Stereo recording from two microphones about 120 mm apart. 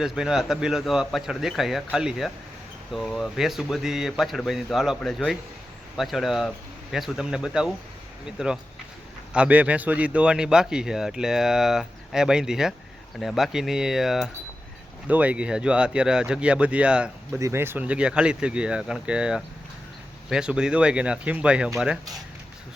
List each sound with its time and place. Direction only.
0.0 s speech: 5° right (ahead or behind)
9.3 s speech: 10° right (ahead or behind)
17.3 s speech: 20° right (ahead or behind)